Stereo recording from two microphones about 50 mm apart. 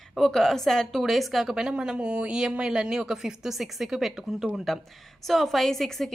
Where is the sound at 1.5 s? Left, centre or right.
Centre.